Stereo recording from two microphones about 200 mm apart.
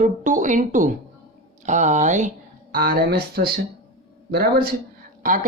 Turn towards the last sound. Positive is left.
turn(degrees=-40)  # may be behind; listen again after turning